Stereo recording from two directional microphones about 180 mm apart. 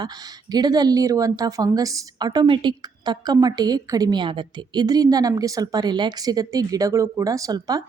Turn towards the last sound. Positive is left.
turn(degrees=-20)  # may be behind; listen again after turning